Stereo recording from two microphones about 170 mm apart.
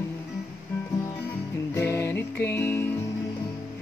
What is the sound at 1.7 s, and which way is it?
Music, 15° left (ahead or behind).